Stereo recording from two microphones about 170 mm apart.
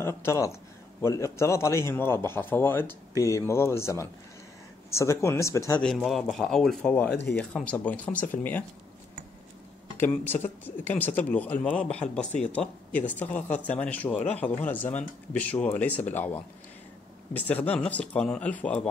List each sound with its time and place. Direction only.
0.0 s speech: 15° left (ahead or behind)
5.8 s a man's voice: centre (ahead or behind)
9.9 s speech: 10° left (ahead or behind)